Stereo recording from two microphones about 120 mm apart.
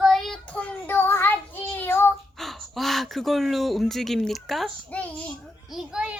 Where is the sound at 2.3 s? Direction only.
Centre (ahead or behind).